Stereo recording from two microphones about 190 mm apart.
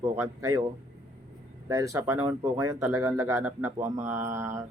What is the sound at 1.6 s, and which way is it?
Speech, 15° right (ahead or behind).